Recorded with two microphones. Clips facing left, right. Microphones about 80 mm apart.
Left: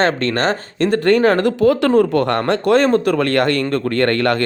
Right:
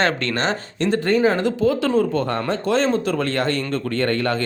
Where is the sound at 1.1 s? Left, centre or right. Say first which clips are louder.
Left 5 dB; left.